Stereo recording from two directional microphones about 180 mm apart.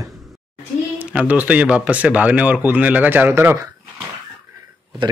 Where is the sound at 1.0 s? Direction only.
5° right (ahead or behind).